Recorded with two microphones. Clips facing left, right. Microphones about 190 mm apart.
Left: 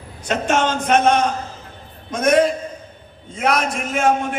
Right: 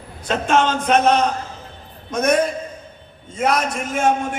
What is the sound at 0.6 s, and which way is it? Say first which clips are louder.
A man's voice: even; 55° left (ahead or behind).